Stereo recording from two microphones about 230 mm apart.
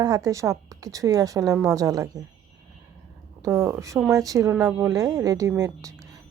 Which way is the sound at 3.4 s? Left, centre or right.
Centre.